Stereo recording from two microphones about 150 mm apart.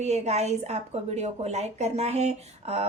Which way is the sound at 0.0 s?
50° right (ahead or behind).